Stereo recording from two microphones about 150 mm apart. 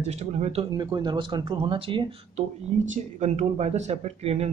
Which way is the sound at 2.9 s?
50° right (ahead or behind).